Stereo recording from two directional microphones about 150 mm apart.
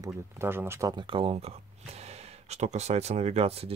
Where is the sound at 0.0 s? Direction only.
15° right (ahead or behind).